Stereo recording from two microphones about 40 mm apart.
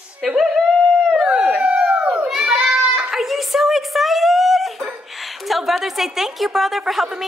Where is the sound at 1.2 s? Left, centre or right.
Right.